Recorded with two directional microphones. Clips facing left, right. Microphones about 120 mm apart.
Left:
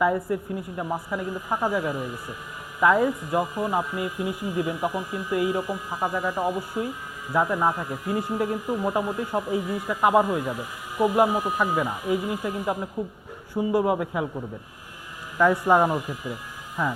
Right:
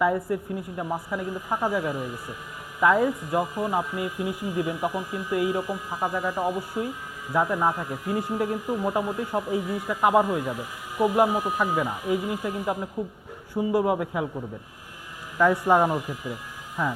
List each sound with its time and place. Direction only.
0.0 s speech: 25° left (ahead or behind)
12.7 s speech: 35° left (ahead or behind)
13.6 s speech: 25° left (ahead or behind)